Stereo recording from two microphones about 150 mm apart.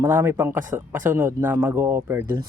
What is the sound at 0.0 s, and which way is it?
Speech, 15° right (ahead or behind).